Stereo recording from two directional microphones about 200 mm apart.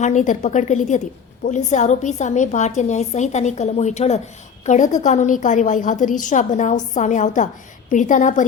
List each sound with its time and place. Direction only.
0.0 s a woman's voice: 35° left (ahead or behind)